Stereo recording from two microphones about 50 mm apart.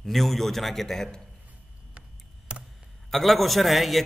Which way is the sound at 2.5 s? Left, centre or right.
Right.